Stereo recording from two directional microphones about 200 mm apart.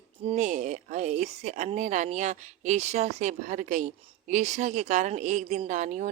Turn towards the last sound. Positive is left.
turn(degrees=-35)  # may be behind; listen again after turning